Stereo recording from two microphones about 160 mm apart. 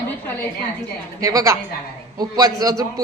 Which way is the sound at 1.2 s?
20° right (ahead or behind).